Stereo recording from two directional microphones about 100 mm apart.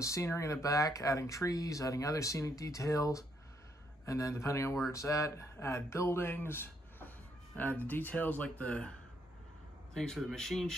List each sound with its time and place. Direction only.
0.0 s speech: 30° left (ahead or behind); by 8.9 s 15° left (ahead or behind)
9.9 s speech: 5° left (ahead or behind)